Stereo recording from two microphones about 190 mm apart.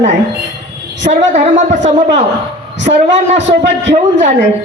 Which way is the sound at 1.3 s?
40° right (ahead or behind).